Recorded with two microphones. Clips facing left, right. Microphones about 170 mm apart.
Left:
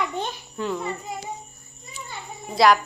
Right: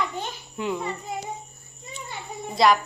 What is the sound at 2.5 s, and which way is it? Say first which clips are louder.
Speech: left 2 dB; centre (ahead or behind).